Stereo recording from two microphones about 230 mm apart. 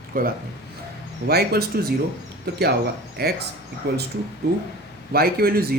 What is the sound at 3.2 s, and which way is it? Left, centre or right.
Speech, right.